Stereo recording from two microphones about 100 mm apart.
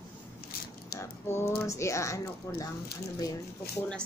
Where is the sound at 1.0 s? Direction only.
25° left (ahead or behind).